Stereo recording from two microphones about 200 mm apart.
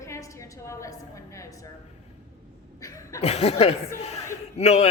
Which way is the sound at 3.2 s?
30° left (ahead or behind).